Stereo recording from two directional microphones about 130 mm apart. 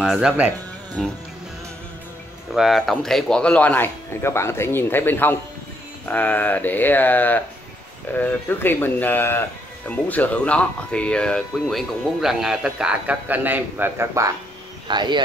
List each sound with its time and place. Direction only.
0.0 s speech: 5° right (ahead or behind)
2.5 s speech: centre (ahead or behind); by 14.3 s 20° right (ahead or behind)
14.9 s speech: 35° right (ahead or behind)